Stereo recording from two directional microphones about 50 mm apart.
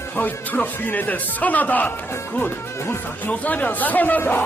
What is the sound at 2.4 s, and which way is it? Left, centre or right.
Speech, left.